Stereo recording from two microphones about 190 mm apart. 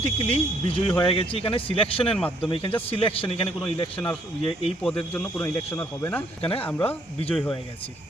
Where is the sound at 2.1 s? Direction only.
5° left (ahead or behind).